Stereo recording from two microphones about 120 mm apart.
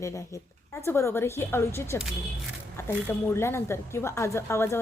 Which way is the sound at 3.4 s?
20° left (ahead or behind).